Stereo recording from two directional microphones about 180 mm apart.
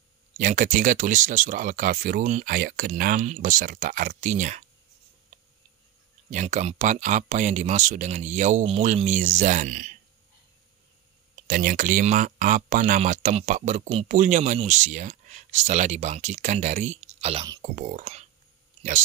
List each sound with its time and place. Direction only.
0.4 s speech: 50° right (ahead or behind)
5.3 s a sound: 40° right (ahead or behind)
6.3 s speech: 40° right (ahead or behind)
11.4 s speech: 50° right (ahead or behind); by 17.5 s 35° right (ahead or behind)
17.7 s speech: 45° right (ahead or behind)